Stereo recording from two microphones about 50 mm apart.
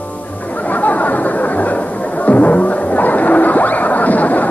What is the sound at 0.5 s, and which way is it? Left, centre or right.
Chatter, left.